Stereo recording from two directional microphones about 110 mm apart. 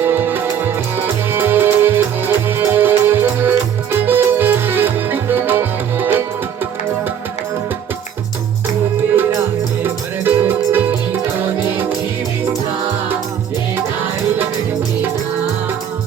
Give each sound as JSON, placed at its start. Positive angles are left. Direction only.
{"t": 0.0, "sound": "music", "side_deg": -20}
{"t": 9.8, "sound": "music", "side_deg": -20}
{"t": 13.7, "sound": "music", "side_deg": -20}